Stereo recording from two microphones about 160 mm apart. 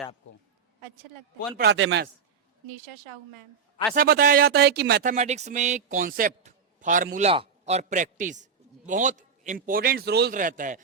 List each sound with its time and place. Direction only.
1.5 s a man's voice: 90° right
3.9 s speech: 70° right (ahead or behind); by 5.0 s 90° right
5.0 s a man's voice: 45° right (ahead or behind)
7.3 s a man's voice: 40° right (ahead or behind); by 10.3 s 90° right
10.3 s a man's voice: 55° right (ahead or behind)